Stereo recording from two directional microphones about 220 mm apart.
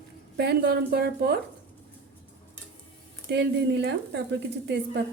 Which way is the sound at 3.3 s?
50° right (ahead or behind).